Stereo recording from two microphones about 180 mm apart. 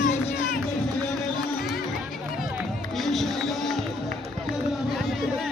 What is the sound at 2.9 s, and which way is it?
Music, centre (ahead or behind).